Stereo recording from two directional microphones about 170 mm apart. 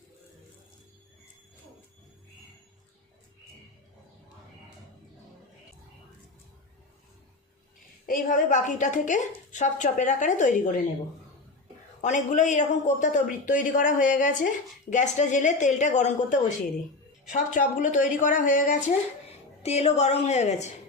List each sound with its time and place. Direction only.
8.0 s speech: 50° left (ahead or behind)
12.0 s speech: 45° left (ahead or behind)
19.6 s a woman's voice: 40° left (ahead or behind)